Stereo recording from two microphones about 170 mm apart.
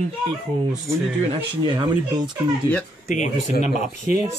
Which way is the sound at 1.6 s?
25° right (ahead or behind).